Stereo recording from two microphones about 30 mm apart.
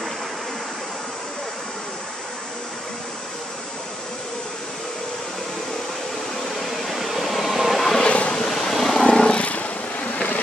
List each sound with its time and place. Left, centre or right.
6.6 s vehicle: centre
8.0 s vehicle: left
8.5 s vehicle: centre
9.0 s vehicle: left
9.4 s vehicle: left